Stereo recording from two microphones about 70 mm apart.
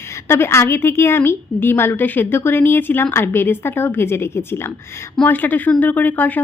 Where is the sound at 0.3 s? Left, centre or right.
Left.